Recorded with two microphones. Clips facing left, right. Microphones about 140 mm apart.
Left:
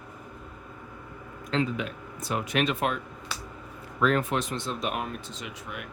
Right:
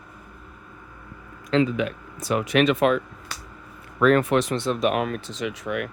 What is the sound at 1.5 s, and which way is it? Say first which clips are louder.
Speech: right 7 dB; 85° right.